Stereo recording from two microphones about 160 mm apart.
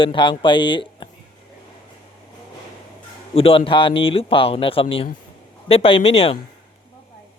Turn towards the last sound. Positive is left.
turn(degrees=35)  # may be behind; listen again after turning